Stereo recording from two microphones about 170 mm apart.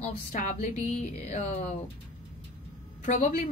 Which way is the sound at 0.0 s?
45° left (ahead or behind).